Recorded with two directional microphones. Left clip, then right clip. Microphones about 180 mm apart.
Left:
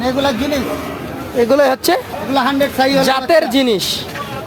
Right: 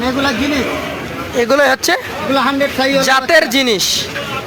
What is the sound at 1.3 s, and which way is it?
Speech, 5° left (ahead or behind).